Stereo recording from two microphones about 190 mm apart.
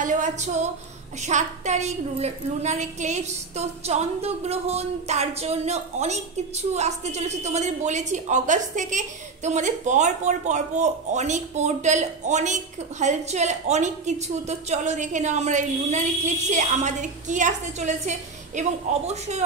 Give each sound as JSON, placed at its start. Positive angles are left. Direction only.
{"t": 0.0, "sound": "music", "side_deg": -40}
{"t": 1.2, "sound": "a woman's voice", "side_deg": -35}